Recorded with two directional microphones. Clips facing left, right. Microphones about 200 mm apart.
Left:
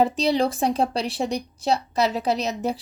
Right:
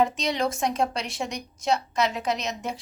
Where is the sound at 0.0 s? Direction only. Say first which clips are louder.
Left 4 dB; 35° left (ahead or behind).